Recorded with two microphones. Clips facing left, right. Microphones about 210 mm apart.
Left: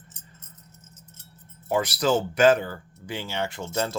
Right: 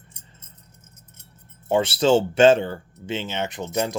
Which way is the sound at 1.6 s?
25° right (ahead or behind).